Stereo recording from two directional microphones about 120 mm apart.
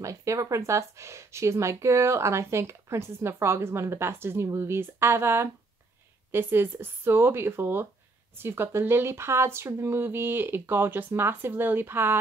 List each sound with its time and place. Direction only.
0.0 s speech: 25° right (ahead or behind)